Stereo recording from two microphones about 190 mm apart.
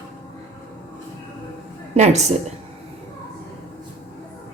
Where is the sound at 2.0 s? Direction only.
35° right (ahead or behind).